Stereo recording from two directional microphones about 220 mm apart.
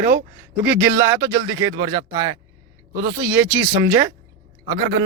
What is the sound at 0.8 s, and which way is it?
Speech, 10° right (ahead or behind).